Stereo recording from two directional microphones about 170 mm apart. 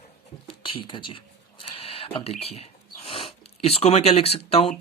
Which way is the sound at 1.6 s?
35° left (ahead or behind).